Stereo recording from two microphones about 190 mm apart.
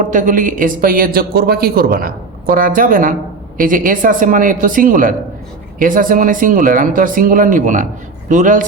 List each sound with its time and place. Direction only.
0.0 s a man's voice: 40° right (ahead or behind)